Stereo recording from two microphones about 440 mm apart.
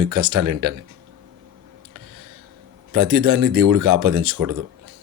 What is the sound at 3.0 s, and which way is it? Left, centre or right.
Speech, right.